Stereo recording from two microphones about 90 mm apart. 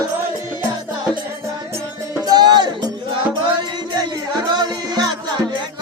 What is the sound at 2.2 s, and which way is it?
Music, 50° right (ahead or behind).